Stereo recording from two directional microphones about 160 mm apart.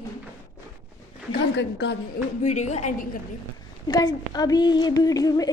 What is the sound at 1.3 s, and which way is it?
Speech, 90° left.